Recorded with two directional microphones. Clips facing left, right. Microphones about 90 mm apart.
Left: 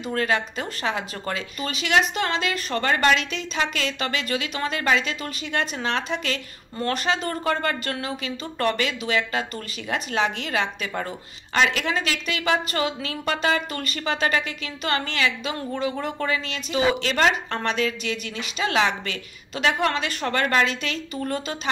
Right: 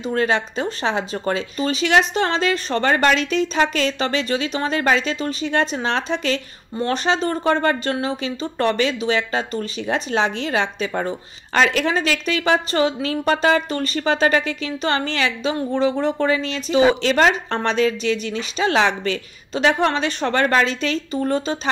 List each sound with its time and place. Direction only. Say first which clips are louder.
0.0 s speech: right 4 dB; 25° right (ahead or behind)